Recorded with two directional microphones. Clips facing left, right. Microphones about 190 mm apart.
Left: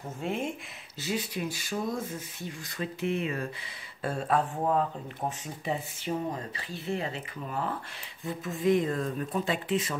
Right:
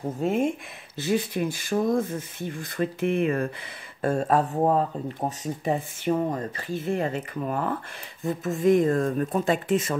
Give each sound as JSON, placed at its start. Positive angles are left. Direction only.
{"t": 0.2, "sound": "speech", "side_deg": -45}